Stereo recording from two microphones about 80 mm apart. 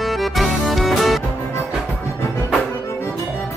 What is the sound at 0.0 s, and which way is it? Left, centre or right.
Music, centre.